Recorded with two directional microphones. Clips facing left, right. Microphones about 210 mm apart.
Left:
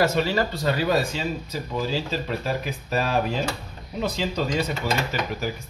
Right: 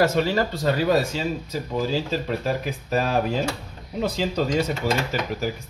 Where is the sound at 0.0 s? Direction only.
50° right (ahead or behind).